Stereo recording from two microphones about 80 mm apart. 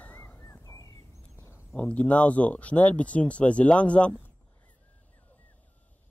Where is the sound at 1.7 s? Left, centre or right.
Centre.